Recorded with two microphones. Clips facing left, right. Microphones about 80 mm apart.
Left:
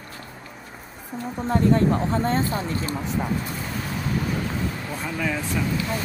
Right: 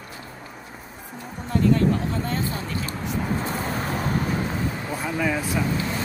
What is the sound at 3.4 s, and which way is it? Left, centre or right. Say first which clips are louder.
Vehicle: right 4 dB; right.